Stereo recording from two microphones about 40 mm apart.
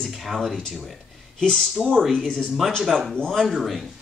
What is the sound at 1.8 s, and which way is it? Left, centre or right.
Speech, centre.